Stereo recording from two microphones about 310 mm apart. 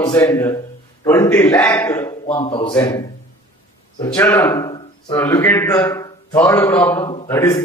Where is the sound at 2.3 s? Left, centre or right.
Centre.